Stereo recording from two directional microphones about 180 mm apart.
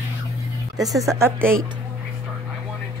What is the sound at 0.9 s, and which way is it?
Speech, 15° right (ahead or behind).